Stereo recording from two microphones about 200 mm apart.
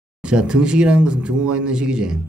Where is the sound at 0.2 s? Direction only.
5° right (ahead or behind).